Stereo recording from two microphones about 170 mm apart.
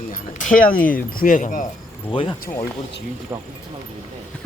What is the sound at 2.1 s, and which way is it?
Speech, 30° left (ahead or behind).